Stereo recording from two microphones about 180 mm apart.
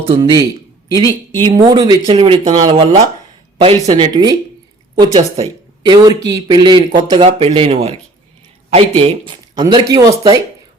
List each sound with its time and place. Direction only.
0.0 s a man's voice: 25° right (ahead or behind)
9.6 s speech: 20° right (ahead or behind)